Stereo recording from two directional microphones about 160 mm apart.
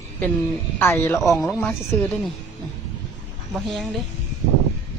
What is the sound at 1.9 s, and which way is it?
Speech, 10° left (ahead or behind).